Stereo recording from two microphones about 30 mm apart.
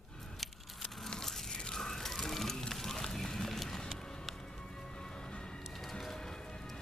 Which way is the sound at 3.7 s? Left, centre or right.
Left.